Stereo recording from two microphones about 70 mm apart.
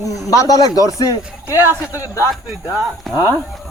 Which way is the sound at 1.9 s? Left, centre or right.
Left.